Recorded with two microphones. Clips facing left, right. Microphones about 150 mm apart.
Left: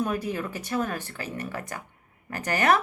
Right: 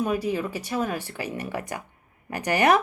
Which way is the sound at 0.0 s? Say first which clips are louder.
Right 3 dB; 10° right (ahead or behind).